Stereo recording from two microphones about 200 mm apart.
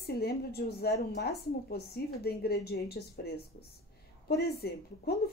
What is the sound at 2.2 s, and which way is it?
Speech, 50° left (ahead or behind).